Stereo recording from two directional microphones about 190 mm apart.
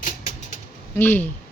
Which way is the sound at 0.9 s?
10° left (ahead or behind).